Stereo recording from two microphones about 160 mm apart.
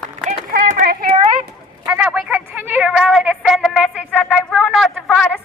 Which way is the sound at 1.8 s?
5° right (ahead or behind).